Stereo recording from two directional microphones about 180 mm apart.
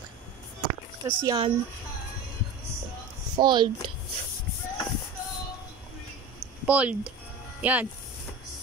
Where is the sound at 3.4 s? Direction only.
25° right (ahead or behind).